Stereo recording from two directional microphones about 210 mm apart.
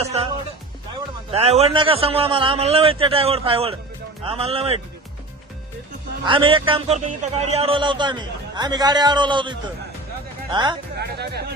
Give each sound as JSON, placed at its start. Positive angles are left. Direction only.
{"t": 0.0, "sound": "music", "side_deg": -30}
{"t": 1.3, "sound": "a man's voice", "side_deg": -30}
{"t": 6.2, "sound": "a man's voice", "side_deg": -25}
{"t": 10.9, "sound": "speech", "side_deg": -50}